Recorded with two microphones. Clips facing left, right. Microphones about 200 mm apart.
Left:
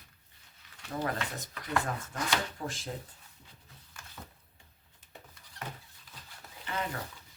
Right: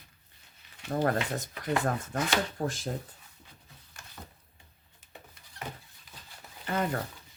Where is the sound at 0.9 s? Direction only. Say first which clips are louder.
Right 6 dB; 50° right (ahead or behind).